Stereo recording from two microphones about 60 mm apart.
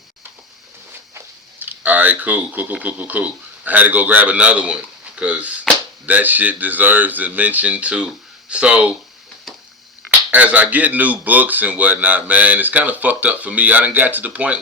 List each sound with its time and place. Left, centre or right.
1.5 s speech: right
10.1 s speech: right